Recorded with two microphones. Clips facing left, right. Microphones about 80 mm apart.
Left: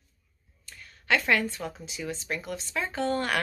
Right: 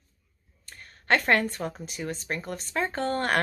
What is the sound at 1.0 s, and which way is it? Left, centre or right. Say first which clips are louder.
A woman's voice: right 2 dB; right.